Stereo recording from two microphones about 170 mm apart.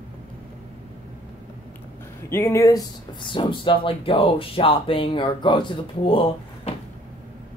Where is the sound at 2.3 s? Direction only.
15° left (ahead or behind); by 6.7 s 30° left (ahead or behind).